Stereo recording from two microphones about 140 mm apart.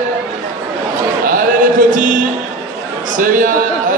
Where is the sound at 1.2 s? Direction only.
75° right (ahead or behind).